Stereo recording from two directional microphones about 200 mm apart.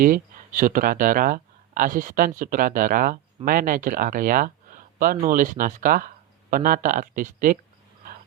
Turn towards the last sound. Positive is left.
turn(degrees=-40)  # may be behind; listen again after turning